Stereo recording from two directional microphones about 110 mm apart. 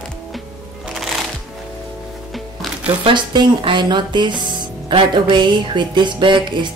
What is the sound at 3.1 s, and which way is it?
Speech, 45° right (ahead or behind).